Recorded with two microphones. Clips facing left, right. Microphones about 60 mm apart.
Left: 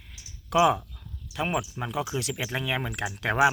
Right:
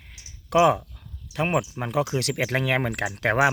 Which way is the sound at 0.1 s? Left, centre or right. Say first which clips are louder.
Right 3 dB; right.